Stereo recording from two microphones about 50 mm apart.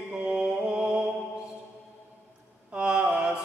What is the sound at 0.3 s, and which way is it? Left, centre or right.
Mantra, centre.